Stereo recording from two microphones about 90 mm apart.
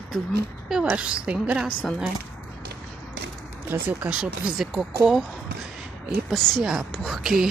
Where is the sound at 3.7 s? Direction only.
15° right (ahead or behind).